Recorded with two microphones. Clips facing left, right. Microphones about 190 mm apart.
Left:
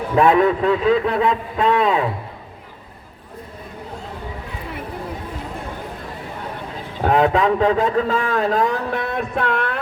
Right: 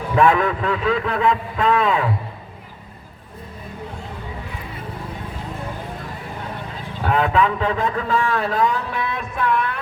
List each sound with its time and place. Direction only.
0.2 s a man's voice: 30° left (ahead or behind)
7.0 s a man's voice: 40° left (ahead or behind); by 9.8 s 65° left (ahead or behind)